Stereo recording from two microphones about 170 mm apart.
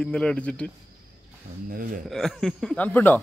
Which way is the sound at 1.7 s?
50° right (ahead or behind).